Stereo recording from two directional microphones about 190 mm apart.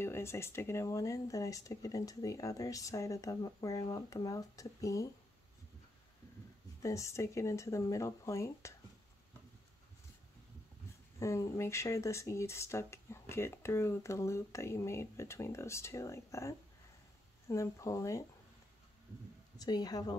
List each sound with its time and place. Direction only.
0.0 s speech: 15° left (ahead or behind)
6.8 s speech: 15° left (ahead or behind)
11.1 s speech: 15° left (ahead or behind)
19.6 s a woman's voice: 20° left (ahead or behind)